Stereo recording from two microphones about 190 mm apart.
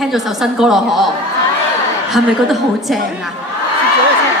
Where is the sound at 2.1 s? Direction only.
Centre (ahead or behind).